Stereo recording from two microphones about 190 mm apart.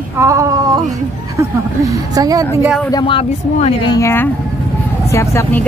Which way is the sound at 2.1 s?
20° right (ahead or behind).